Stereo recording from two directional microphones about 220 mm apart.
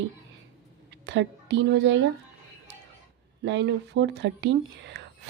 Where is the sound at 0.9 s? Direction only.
55° right (ahead or behind).